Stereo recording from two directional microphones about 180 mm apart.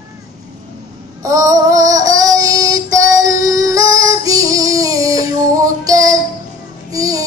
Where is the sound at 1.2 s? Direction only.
20° right (ahead or behind).